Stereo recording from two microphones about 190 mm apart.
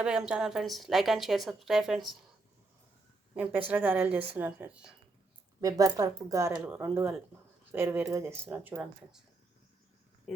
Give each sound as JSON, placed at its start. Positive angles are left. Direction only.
{"t": 0.0, "sound": "a woman's voice", "side_deg": -5}
{"t": 3.3, "sound": "a woman's voice", "side_deg": -10}
{"t": 5.5, "sound": "a woman's voice", "side_deg": -20}
{"t": 10.3, "sound": "a woman's voice", "side_deg": 0}